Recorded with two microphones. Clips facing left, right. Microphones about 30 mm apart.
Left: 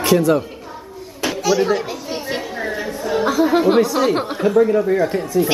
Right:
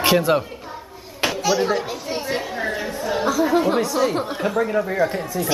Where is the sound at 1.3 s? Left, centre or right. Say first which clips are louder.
Left 4 dB; centre.